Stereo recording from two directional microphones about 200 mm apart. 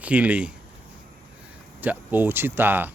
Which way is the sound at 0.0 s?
5° right (ahead or behind).